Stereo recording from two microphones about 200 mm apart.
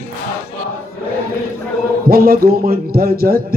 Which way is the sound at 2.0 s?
50° right (ahead or behind).